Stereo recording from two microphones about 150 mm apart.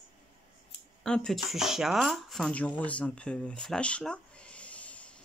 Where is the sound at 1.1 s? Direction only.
5° left (ahead or behind).